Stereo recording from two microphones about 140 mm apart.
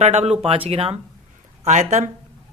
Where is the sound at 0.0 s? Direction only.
50° right (ahead or behind).